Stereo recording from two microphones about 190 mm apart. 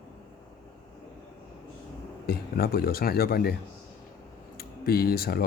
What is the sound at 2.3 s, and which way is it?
Speech, 55° left (ahead or behind).